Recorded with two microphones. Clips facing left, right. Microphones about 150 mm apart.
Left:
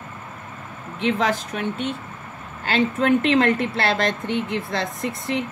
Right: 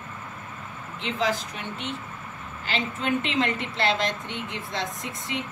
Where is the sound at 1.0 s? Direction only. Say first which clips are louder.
Left 5 dB; 55° left (ahead or behind).